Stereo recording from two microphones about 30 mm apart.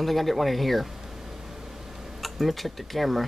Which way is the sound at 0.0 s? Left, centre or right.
Centre.